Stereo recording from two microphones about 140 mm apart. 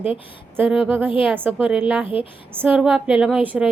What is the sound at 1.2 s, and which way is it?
A woman's voice, 10° right (ahead or behind).